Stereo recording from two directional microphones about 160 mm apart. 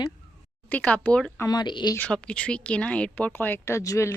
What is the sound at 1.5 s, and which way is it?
Speech, 25° left (ahead or behind).